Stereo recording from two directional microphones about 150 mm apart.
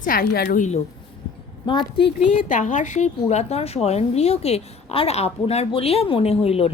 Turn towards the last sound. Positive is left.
turn(degrees=45)  # may be behind; listen again after turning